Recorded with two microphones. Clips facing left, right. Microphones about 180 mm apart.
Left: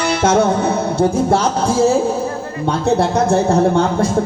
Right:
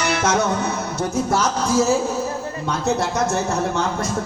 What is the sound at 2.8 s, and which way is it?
Speech, 30° left (ahead or behind).